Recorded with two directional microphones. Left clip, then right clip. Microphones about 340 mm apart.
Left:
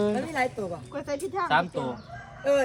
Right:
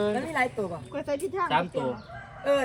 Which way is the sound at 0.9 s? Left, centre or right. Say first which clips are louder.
Right 1 dB; centre.